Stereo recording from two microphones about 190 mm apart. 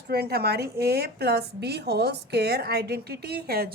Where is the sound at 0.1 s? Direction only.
55° right (ahead or behind).